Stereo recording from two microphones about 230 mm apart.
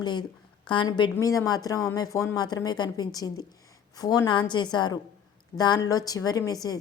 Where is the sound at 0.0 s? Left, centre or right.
Centre.